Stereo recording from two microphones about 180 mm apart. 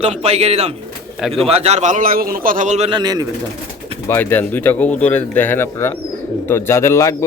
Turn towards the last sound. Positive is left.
turn(degrees=15)  # may be behind; listen again after turning